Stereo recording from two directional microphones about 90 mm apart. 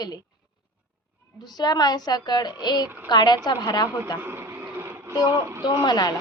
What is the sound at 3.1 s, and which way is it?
Speech, 55° left (ahead or behind).